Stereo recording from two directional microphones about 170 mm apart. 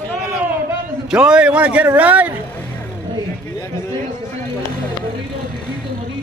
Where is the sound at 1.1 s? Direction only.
5° right (ahead or behind).